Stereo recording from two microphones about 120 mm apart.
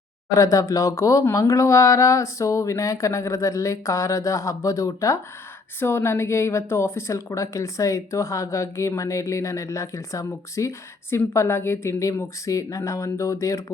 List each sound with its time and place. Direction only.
0.3 s speech: 25° left (ahead or behind)